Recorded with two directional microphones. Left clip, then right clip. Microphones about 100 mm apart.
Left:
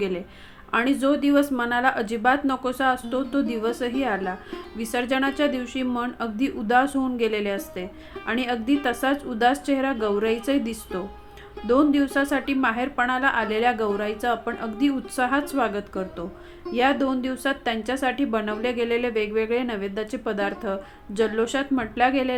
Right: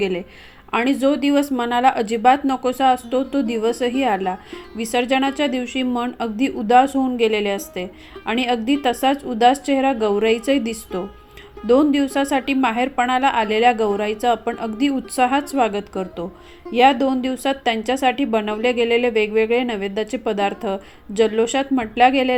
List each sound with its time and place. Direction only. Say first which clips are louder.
0.7 s a woman's voice: right 3 dB; 30° right (ahead or behind)